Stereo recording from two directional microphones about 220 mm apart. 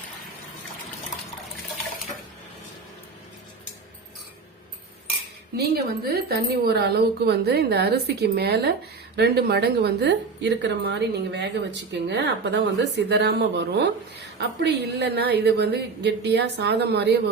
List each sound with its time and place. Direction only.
5.5 s a woman's voice: 45° right (ahead or behind)